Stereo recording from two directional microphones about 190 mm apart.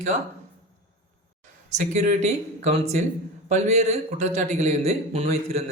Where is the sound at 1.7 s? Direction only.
40° right (ahead or behind).